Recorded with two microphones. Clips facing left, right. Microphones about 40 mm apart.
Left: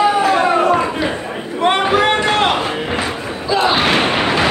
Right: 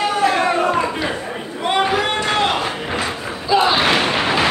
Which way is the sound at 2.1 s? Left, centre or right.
Centre.